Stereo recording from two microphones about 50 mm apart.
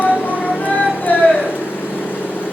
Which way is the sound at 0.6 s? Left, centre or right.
Left.